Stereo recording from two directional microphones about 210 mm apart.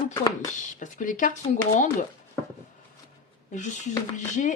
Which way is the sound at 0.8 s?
40° left (ahead or behind).